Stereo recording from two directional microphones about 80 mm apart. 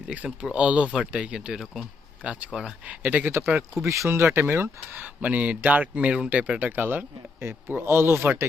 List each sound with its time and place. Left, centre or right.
0.3 s speech: centre
3.8 s a man's voice: right; by 6.6 s centre
6.6 s a man's voice: right